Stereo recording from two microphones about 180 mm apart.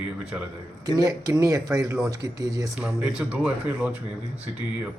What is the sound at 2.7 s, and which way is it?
Speech, 5° right (ahead or behind).